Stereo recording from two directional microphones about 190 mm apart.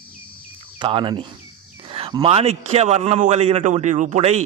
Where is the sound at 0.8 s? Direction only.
25° right (ahead or behind).